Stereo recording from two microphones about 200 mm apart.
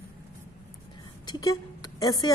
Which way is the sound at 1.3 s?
20° left (ahead or behind).